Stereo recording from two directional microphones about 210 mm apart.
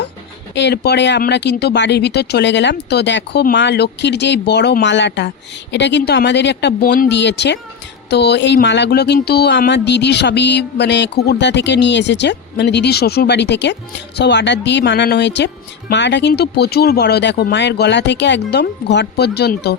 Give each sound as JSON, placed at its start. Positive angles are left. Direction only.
{"t": 0.5, "sound": "speech", "side_deg": 55}